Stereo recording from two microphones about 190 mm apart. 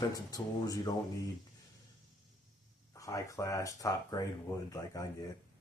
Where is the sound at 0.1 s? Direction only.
20° left (ahead or behind).